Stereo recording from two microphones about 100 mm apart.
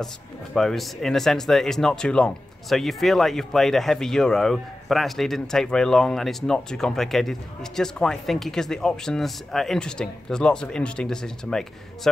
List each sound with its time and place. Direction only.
0.6 s speech: centre (ahead or behind)